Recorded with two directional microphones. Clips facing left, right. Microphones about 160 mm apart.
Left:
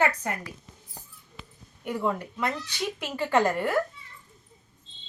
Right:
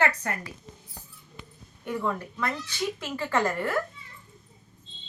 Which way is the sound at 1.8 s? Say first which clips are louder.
Left 1 dB; 15° left (ahead or behind).